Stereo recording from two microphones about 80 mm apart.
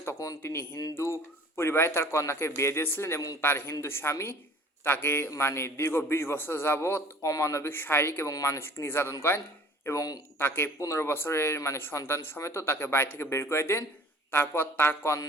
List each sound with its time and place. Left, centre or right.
0.2 s speech: left
0.9 s speech: left
7.3 s speech: left
9.8 s speech: left
10.3 s speech: left